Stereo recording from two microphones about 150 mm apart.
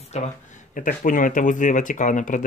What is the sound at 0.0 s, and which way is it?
Speech, 50° left (ahead or behind).